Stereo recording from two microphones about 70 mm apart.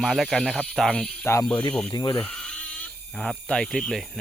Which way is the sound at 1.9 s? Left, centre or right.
Left.